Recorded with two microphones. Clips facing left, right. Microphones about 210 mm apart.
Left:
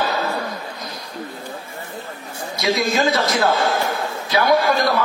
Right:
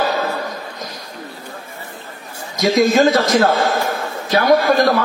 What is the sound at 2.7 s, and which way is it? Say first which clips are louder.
A man's voice: right 6 dB; 45° right (ahead or behind).